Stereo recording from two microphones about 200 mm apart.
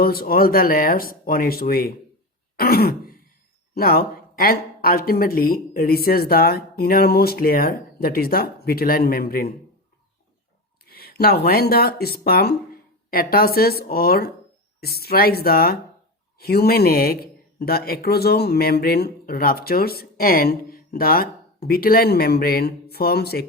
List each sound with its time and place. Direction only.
0.0 s speech: 50° left (ahead or behind)
2.6 s throat clearing: 50° left (ahead or behind)
3.8 s speech: 50° left (ahead or behind)
10.8 s speech: 50° left (ahead or behind)